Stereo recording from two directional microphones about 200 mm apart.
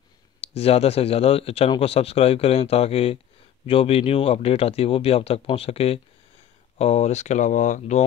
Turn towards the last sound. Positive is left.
turn(degrees=35)  # may be behind; listen again after turning